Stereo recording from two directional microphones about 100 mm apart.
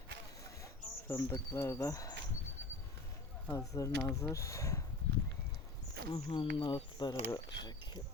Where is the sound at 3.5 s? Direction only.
35° left (ahead or behind).